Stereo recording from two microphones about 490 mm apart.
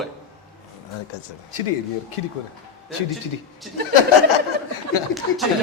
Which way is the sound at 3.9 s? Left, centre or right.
Left.